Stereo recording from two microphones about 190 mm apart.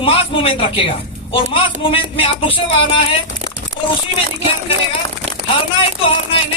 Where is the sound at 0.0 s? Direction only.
30° left (ahead or behind).